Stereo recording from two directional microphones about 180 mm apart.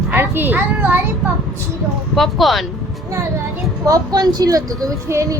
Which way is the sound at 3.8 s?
20° right (ahead or behind).